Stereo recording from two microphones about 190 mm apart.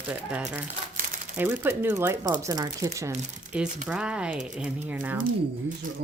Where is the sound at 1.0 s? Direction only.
40° right (ahead or behind).